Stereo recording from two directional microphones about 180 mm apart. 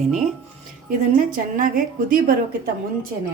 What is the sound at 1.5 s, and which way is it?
Speech, 50° right (ahead or behind).